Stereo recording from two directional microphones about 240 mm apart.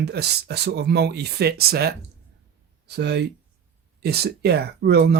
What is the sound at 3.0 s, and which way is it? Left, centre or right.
Speech, right.